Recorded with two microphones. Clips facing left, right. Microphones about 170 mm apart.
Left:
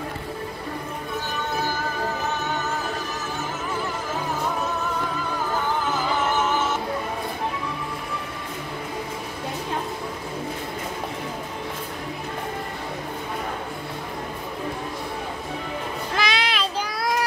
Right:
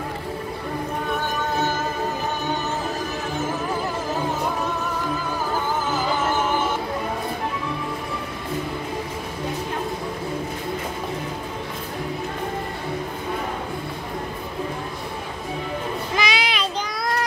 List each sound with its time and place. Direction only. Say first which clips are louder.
6.4 s music: right 1 dB; 15° right (ahead or behind)
16.2 s child singing: even; centre (ahead or behind)